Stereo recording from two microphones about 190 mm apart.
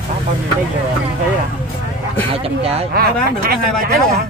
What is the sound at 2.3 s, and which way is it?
Speech, 30° right (ahead or behind).